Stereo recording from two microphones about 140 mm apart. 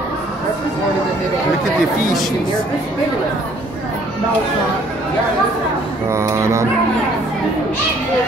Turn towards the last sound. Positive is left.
turn(degrees=-20)  # may be behind; listen again after turning